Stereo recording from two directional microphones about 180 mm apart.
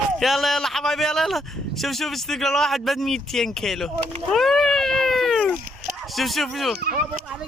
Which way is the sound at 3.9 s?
30° right (ahead or behind).